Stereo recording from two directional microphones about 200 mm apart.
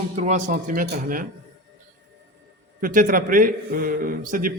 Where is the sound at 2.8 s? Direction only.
45° right (ahead or behind).